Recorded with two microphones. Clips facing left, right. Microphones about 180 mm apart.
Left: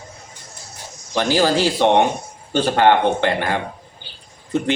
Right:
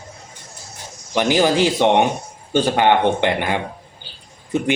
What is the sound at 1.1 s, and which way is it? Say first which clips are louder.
Speech: right 1 dB; 15° right (ahead or behind).